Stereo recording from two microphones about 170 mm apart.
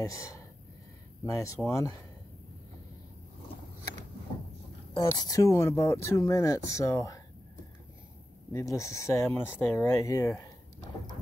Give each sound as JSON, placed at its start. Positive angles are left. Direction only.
{"t": 0.0, "sound": "speech", "side_deg": 20}
{"t": 4.9, "sound": "speech", "side_deg": 20}
{"t": 8.5, "sound": "speech", "side_deg": 20}